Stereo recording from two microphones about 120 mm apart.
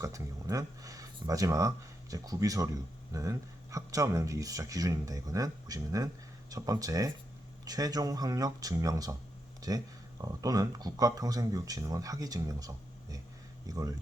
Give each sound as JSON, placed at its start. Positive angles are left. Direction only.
{"t": 0.0, "sound": "speech", "side_deg": -25}